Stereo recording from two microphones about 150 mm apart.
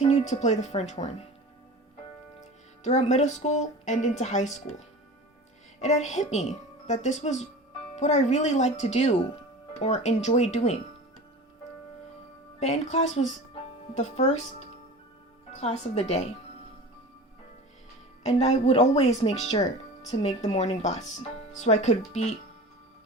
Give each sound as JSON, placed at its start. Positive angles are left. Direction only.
{"t": 0.0, "sound": "a woman's voice", "side_deg": 45}
{"t": 2.4, "sound": "a woman's voice", "side_deg": 50}
{"t": 5.8, "sound": "a woman's voice", "side_deg": 50}
{"t": 12.5, "sound": "a woman's voice", "side_deg": 45}
{"t": 18.3, "sound": "a woman's voice", "side_deg": 45}